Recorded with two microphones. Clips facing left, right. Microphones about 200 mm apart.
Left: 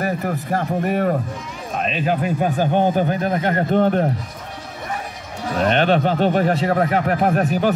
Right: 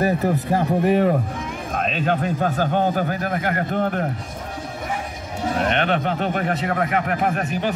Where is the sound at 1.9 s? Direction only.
5° left (ahead or behind); by 4.0 s 30° left (ahead or behind).